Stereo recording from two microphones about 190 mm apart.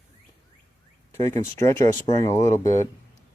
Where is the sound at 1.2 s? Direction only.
15° left (ahead or behind).